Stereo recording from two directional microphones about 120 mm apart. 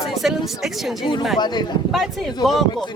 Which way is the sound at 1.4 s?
35° left (ahead or behind).